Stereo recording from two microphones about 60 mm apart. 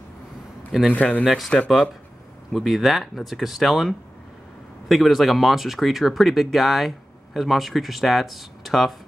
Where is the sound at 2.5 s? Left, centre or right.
Centre.